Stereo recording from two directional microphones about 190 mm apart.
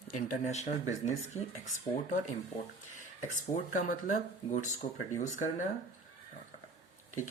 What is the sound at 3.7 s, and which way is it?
Speech, 45° left (ahead or behind).